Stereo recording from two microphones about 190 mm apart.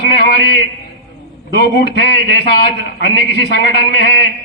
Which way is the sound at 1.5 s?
60° left (ahead or behind).